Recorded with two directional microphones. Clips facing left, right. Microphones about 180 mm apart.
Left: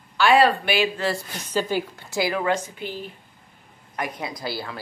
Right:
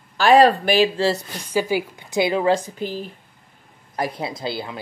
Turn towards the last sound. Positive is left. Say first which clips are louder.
# right 3 dB
turn(degrees=-20)  # may be behind; listen again after turning